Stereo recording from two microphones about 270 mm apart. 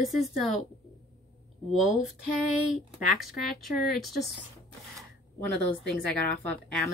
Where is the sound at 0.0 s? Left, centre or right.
Centre.